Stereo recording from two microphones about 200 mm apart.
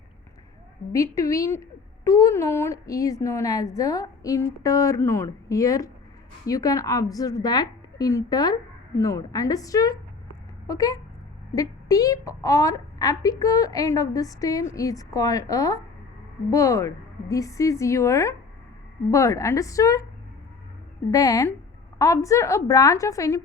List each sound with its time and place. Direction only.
0.9 s a woman's voice: 15° left (ahead or behind)
21.1 s a woman's voice: 15° left (ahead or behind)